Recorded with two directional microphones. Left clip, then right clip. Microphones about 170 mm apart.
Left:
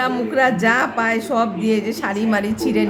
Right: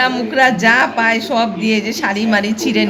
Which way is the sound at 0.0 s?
25° left (ahead or behind).